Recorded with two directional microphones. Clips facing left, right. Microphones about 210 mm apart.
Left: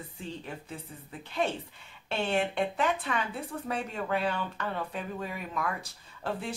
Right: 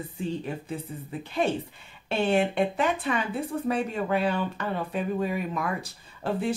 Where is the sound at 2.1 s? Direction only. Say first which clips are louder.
Right 5 dB; 10° right (ahead or behind).